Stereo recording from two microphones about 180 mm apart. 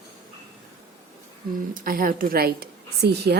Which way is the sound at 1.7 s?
50° right (ahead or behind).